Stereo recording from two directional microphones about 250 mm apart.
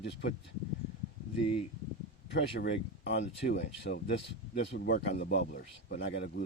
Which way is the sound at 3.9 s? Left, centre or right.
Left.